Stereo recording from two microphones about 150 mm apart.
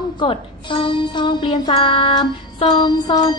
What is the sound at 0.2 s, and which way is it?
Music, 35° left (ahead or behind).